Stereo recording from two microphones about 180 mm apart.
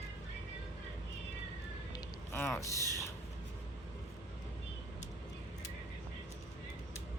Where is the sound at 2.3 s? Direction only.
15° left (ahead or behind).